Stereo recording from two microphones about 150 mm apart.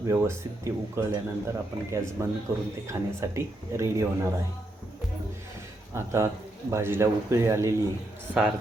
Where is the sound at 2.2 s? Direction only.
20° right (ahead or behind).